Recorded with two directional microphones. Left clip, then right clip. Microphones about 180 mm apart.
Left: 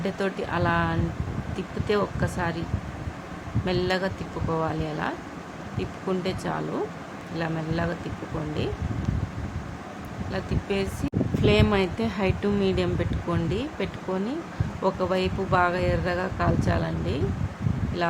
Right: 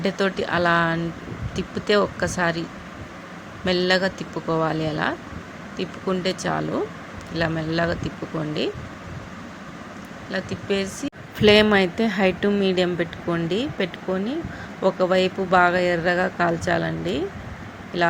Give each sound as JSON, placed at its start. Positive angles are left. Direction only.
{"t": 0.0, "sound": "speech", "side_deg": -15}
{"t": 3.7, "sound": "speech", "side_deg": -15}
{"t": 10.3, "sound": "speech", "side_deg": -10}
{"t": 11.4, "sound": "speech", "side_deg": -20}